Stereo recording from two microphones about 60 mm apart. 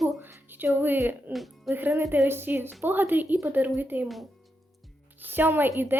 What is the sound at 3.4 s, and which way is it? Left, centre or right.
Speech, right.